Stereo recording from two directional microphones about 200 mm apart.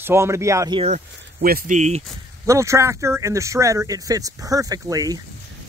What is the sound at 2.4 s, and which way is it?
Speech, 15° right (ahead or behind).